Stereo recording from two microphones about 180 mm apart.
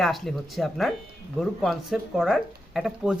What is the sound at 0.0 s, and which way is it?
Speech, centre (ahead or behind).